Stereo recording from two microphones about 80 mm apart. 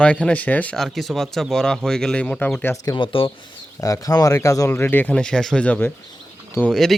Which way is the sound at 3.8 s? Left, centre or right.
Left.